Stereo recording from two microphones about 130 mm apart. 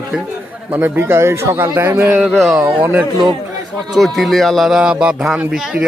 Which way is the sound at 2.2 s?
Centre (ahead or behind).